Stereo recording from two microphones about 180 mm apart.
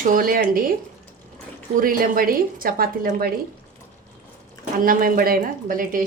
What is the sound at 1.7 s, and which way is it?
A woman's voice, 50° right (ahead or behind).